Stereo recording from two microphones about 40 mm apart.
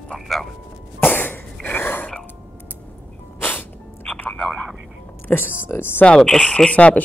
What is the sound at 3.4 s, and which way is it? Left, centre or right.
Sneeze, left.